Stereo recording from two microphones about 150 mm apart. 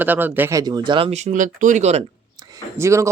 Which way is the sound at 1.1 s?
45° right (ahead or behind).